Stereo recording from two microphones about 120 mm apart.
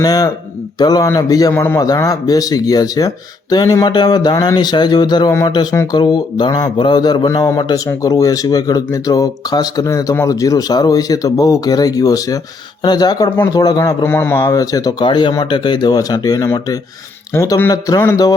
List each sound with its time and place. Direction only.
0.0 s a man's voice: 30° left (ahead or behind)
14.0 s a man's voice: 20° left (ahead or behind)
14.4 s a man's voice: 30° left (ahead or behind)